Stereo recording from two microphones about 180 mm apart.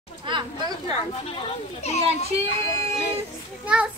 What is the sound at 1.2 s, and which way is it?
Speech, 35° left (ahead or behind).